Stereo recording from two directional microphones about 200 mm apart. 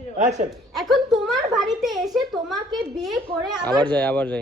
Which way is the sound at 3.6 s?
20° right (ahead or behind).